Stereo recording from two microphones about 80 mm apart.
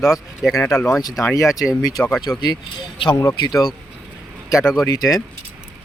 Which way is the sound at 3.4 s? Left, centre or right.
Left.